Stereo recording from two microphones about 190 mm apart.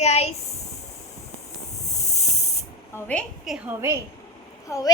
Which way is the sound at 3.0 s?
5° left (ahead or behind).